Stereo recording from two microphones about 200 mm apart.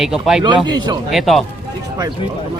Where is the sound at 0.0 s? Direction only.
Centre (ahead or behind).